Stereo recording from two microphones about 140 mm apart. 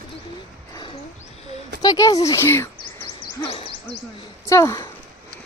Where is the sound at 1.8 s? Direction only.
25° left (ahead or behind).